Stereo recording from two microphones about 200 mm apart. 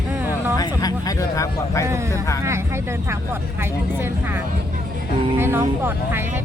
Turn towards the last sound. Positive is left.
turn(degrees=-10)  # may be behind; listen again after turning